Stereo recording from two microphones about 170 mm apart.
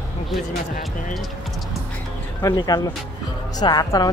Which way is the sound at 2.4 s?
20° left (ahead or behind).